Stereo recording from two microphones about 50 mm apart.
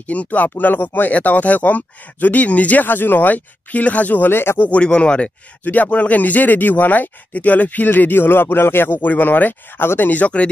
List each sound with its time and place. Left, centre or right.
0.0 s speech: left
4.3 s speech: left
4.6 s speech: left
5.6 s speech: left